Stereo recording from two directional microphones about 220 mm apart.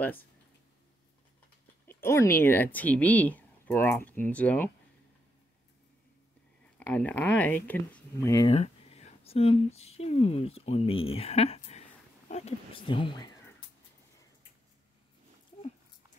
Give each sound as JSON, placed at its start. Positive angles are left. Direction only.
{"t": 0.0, "sound": "speech", "side_deg": 10}
{"t": 1.9, "sound": "speech", "side_deg": 10}
{"t": 6.9, "sound": "speech", "side_deg": 5}
{"t": 8.5, "sound": "speech", "side_deg": 30}